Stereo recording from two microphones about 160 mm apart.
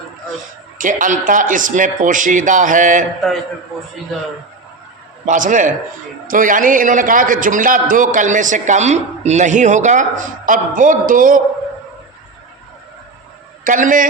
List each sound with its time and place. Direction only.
0.8 s a man's voice: 55° right (ahead or behind)
5.2 s a man's voice: 55° right (ahead or behind)
13.7 s a man's voice: 55° right (ahead or behind)